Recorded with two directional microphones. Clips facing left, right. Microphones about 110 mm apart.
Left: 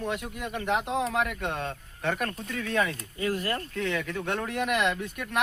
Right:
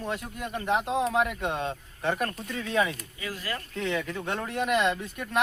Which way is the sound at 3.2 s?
55° left (ahead or behind).